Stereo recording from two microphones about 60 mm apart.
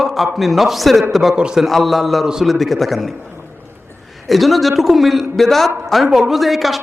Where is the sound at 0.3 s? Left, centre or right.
Centre.